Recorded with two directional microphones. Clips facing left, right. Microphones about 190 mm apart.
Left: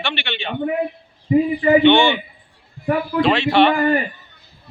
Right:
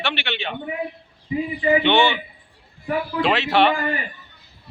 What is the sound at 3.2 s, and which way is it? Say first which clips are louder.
Speech: left 4 dB; 5° right (ahead or behind).